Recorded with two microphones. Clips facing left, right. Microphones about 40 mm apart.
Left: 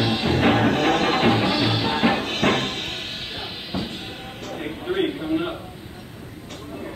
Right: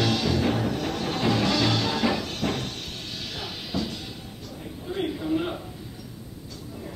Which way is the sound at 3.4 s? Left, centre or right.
Left.